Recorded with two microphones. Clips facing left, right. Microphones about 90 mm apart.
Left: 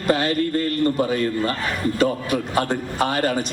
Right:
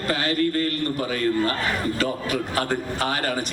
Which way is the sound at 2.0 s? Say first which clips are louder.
Left 4 dB; 20° left (ahead or behind).